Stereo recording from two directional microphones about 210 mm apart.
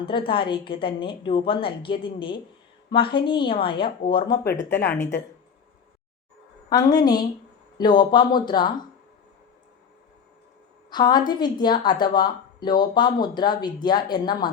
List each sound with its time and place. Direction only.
0.3 s speech: 25° left (ahead or behind)
4.7 s a woman's voice: 10° left (ahead or behind)
6.7 s speech: 20° left (ahead or behind)
10.8 s speech: 20° left (ahead or behind)